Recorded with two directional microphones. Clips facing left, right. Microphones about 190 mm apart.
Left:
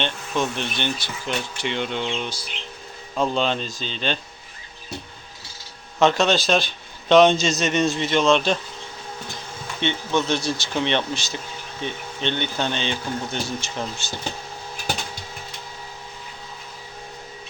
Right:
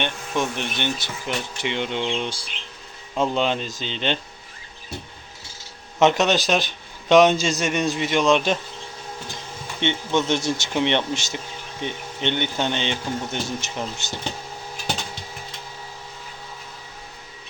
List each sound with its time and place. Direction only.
0.0 s a man's voice: 15° right (ahead or behind)
3.2 s speech: 15° right (ahead or behind)
6.0 s a man's voice: 20° right (ahead or behind)
9.8 s a man's voice: 20° right (ahead or behind)